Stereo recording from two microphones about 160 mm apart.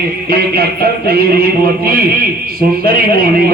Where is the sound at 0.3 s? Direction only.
70° right (ahead or behind).